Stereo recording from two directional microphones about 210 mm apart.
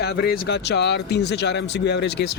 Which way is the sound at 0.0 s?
50° left (ahead or behind).